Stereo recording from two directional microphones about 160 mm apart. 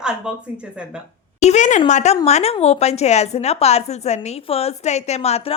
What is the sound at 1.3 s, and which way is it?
A woman's voice, 45° left (ahead or behind).